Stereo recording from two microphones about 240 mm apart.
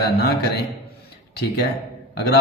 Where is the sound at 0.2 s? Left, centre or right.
Left.